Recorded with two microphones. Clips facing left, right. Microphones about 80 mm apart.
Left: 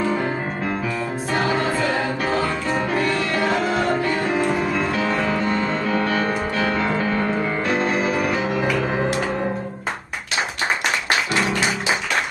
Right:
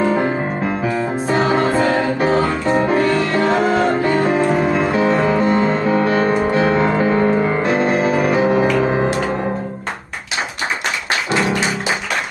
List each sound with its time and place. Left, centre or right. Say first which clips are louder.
0.0 s music: right 5 dB; right
1.6 s music: right 6 dB; right
1.9 s music: right 6 dB; right